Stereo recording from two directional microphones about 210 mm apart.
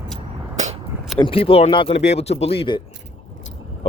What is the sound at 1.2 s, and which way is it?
Speech, 25° left (ahead or behind).